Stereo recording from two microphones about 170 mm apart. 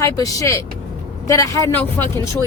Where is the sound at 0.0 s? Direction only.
20° left (ahead or behind).